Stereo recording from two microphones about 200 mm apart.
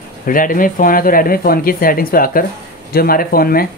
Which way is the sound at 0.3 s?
45° left (ahead or behind).